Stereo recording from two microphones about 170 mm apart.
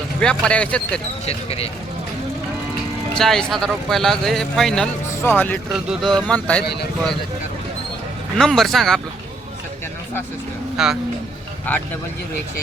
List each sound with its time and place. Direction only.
0.2 s speech: 5° left (ahead or behind)
1.2 s speech: 35° left (ahead or behind)
3.2 s speech: centre (ahead or behind)
5.7 s speech: centre (ahead or behind)
8.4 s speech: centre (ahead or behind)
10.8 s speech: 5° right (ahead or behind)